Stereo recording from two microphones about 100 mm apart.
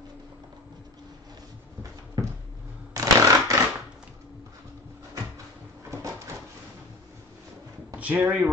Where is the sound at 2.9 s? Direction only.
35° right (ahead or behind).